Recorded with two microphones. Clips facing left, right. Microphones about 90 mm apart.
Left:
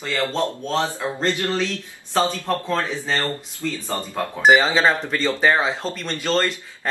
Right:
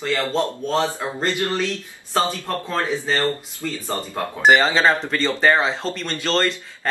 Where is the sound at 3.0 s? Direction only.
20° right (ahead or behind).